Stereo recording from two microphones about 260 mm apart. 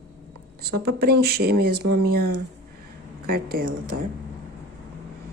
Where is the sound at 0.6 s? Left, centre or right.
Right.